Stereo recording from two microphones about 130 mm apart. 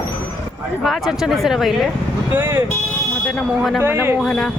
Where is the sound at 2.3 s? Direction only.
15° right (ahead or behind).